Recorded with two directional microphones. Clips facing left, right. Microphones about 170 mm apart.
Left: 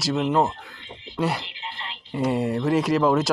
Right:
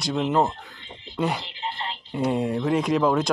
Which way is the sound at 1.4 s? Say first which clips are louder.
Right 5 dB; 35° right (ahead or behind).